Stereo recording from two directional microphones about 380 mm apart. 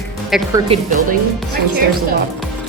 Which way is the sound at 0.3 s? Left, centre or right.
Centre.